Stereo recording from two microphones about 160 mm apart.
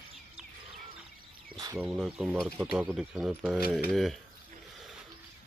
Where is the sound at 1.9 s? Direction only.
Centre (ahead or behind).